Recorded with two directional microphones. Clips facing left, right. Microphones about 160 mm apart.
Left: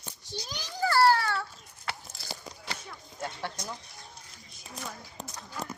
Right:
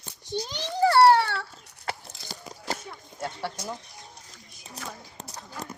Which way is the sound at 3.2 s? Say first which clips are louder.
Right 3 dB; 10° right (ahead or behind).